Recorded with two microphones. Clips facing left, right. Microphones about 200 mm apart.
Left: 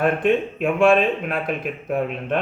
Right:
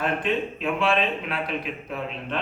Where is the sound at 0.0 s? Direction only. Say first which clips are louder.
Left 6 dB; 50° left (ahead or behind).